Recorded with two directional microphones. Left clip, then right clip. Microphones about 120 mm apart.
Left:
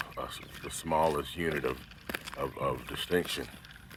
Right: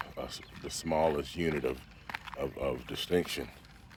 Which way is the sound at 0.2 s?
45° right (ahead or behind).